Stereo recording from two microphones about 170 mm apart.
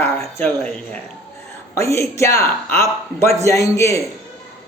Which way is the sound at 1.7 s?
15° left (ahead or behind).